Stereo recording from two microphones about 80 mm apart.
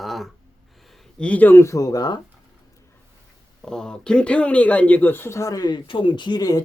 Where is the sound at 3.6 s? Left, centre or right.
Centre; by 5.8 s left.